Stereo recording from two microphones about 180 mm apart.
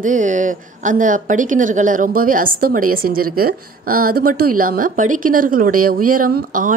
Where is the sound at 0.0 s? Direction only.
45° right (ahead or behind).